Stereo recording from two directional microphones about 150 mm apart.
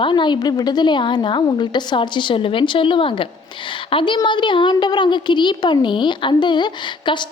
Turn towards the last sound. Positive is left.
turn(degrees=30)  # may be behind; listen again after turning